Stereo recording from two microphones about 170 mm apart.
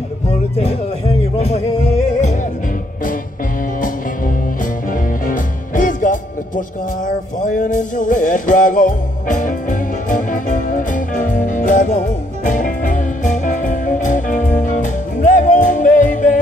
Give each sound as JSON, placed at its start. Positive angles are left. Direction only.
{"t": 0.6, "sound": "speech", "side_deg": 40}
{"t": 4.9, "sound": "music", "side_deg": 50}